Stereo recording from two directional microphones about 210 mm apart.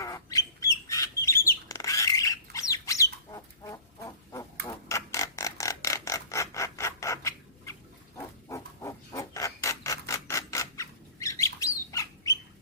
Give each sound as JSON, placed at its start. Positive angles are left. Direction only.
{"t": 0.0, "sound": "squawk", "side_deg": 15}
{"t": 4.6, "sound": "a sound", "side_deg": 15}
{"t": 8.4, "sound": "printer", "side_deg": 15}